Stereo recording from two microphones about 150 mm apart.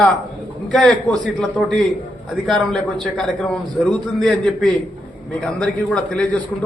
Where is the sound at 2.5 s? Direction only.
Centre (ahead or behind).